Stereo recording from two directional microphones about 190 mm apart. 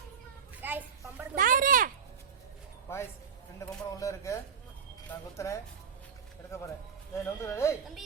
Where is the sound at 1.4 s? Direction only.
45° right (ahead or behind).